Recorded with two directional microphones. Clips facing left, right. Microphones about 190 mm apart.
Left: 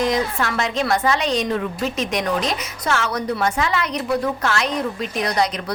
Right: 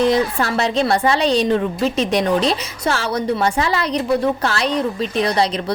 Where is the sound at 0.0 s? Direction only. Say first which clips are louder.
Right 4 dB; 30° right (ahead or behind).